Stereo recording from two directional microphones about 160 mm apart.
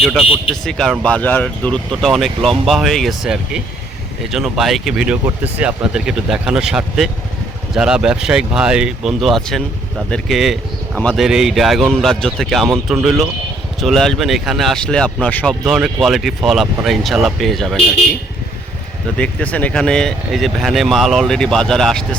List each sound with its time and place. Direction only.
0.0 s speech: centre (ahead or behind)
15.6 s speech: centre (ahead or behind)
19.1 s speech: 10° left (ahead or behind)